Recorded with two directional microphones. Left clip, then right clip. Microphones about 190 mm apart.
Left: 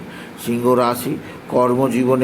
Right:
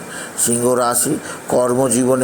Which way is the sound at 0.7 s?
20° right (ahead or behind).